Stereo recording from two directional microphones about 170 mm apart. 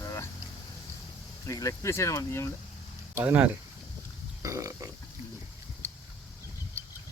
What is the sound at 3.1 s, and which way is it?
Speech, 10° right (ahead or behind).